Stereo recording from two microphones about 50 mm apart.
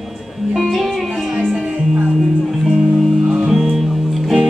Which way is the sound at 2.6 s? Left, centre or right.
Centre.